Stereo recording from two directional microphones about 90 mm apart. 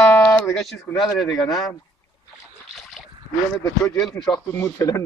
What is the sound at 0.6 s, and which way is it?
Speech, centre (ahead or behind).